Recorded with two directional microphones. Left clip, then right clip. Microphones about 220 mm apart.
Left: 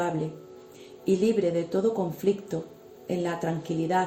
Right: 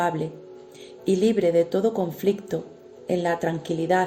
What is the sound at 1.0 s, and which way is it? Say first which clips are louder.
A woman's voice: right 3 dB; 35° right (ahead or behind).